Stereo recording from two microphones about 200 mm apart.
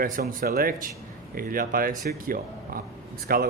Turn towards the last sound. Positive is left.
turn(degrees=-50)  # may be behind; listen again after turning